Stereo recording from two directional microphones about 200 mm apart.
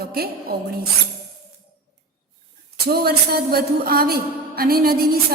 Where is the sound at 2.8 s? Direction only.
50° right (ahead or behind).